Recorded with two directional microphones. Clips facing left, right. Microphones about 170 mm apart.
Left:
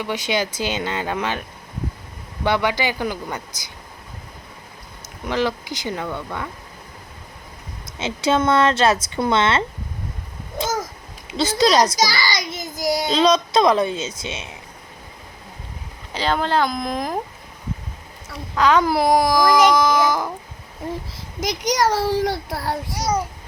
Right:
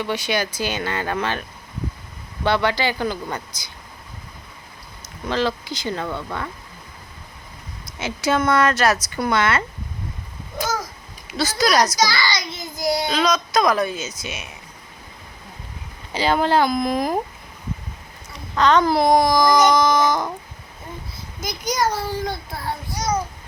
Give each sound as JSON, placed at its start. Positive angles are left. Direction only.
{"t": 0.0, "sound": "speech", "side_deg": 20}
{"t": 5.2, "sound": "speech", "side_deg": 15}
{"t": 7.9, "sound": "speech", "side_deg": 25}
{"t": 10.6, "sound": "a sound", "side_deg": 25}
{"t": 11.3, "sound": "speech", "side_deg": 25}
{"t": 12.3, "sound": "child singing", "side_deg": 45}
{"t": 13.1, "sound": "speech", "side_deg": 30}
{"t": 16.1, "sound": "speech", "side_deg": -5}
{"t": 18.5, "sound": "speech", "side_deg": 10}
{"t": 21.5, "sound": "a child's voice", "side_deg": 80}